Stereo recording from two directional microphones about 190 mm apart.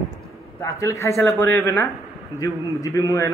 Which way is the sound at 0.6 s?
15° left (ahead or behind).